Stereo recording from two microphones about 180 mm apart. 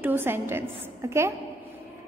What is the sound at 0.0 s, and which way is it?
A woman's voice, 10° right (ahead or behind).